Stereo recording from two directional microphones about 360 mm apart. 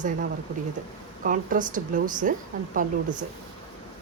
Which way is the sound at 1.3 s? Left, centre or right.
Right.